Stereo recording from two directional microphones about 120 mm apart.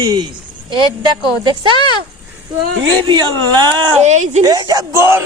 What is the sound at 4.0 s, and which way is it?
Speech, 80° right.